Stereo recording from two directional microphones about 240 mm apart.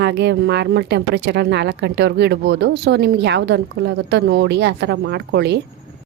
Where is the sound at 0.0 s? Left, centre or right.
Right.